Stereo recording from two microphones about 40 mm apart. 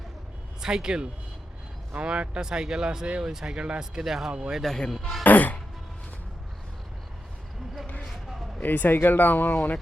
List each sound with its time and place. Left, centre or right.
0.6 s speech: centre
2.0 s speech: right
4.0 s speech: centre
4.9 s speech: centre
5.2 s music: left
8.6 s speech: left